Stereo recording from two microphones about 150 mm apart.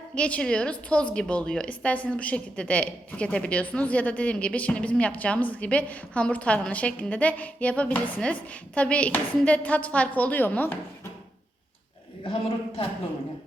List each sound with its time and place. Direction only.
0.1 s a woman's voice: 10° left (ahead or behind)
12.2 s a man's voice: 35° left (ahead or behind)